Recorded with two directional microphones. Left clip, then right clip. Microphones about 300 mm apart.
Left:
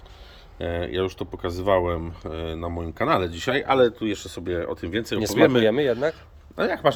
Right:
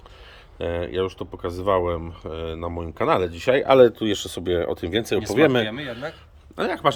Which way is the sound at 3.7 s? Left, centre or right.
Right.